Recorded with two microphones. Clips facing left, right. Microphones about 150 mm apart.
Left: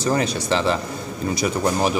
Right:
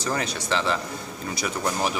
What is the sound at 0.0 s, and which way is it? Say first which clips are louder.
A man's voice: left 7 dB; 30° left (ahead or behind).